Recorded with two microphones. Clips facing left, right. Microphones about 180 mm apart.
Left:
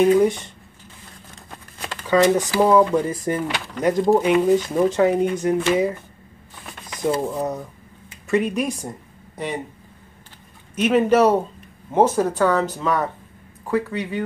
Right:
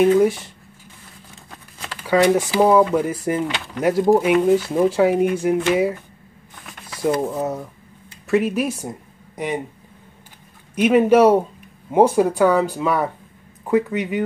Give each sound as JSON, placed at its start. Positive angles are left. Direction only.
{"t": 0.2, "sound": "speech", "side_deg": -5}
{"t": 2.0, "sound": "speech", "side_deg": -10}
{"t": 7.2, "sound": "speech", "side_deg": -5}
{"t": 10.7, "sound": "speech", "side_deg": -10}